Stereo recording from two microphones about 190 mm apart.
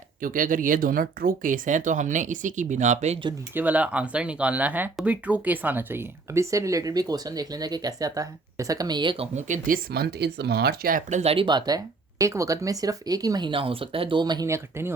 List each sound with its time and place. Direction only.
0.2 s speech: 45° right (ahead or behind)
3.5 s speech: 10° right (ahead or behind)